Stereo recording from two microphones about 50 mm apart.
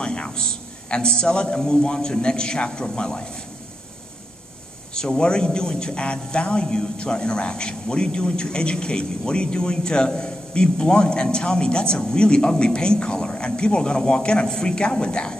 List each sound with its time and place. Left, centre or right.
0.0 s a man's voice: centre
4.9 s a man's voice: centre